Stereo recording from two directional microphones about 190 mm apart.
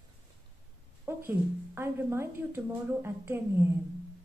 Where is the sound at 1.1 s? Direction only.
10° right (ahead or behind).